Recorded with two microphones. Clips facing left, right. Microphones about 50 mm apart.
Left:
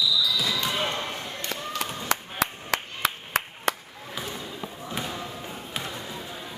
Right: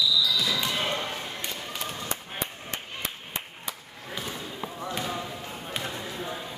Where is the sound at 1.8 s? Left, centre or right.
Left.